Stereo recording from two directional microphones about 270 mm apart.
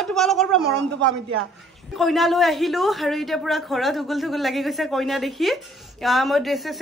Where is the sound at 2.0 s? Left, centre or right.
Centre.